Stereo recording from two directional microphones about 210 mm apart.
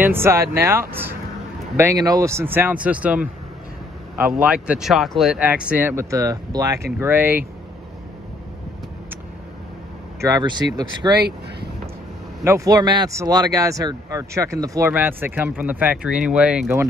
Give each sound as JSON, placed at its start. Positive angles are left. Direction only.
{"t": 0.0, "sound": "speech", "side_deg": -10}
{"t": 10.2, "sound": "speech", "side_deg": -20}
{"t": 12.4, "sound": "speech", "side_deg": -15}